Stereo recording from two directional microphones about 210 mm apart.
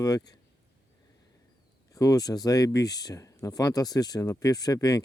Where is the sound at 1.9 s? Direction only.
15° left (ahead or behind).